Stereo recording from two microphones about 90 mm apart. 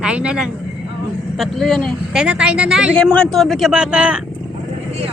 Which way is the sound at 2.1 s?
10° right (ahead or behind).